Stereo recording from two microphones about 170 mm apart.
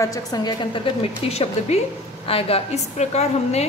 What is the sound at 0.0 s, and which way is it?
A woman's voice, 20° left (ahead or behind).